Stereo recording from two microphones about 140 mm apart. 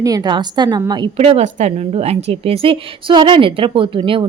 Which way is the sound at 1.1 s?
45° right (ahead or behind).